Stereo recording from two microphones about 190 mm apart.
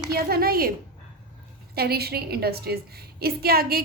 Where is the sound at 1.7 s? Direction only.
55° right (ahead or behind).